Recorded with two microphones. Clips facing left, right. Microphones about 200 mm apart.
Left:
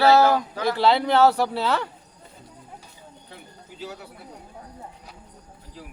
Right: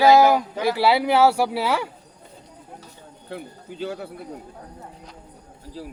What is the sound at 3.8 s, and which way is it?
Speech, 55° right (ahead or behind).